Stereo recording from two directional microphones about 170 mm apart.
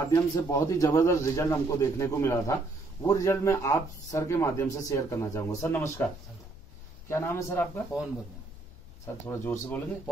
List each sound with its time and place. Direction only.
0.1 s a man's voice: 20° left (ahead or behind)
7.1 s a man's voice: 15° left (ahead or behind)
9.0 s a man's voice: 15° left (ahead or behind)